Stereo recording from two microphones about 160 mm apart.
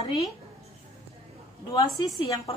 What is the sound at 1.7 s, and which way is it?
Speech, 20° left (ahead or behind).